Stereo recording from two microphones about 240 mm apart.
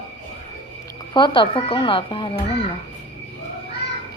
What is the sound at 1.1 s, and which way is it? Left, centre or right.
Speech, centre.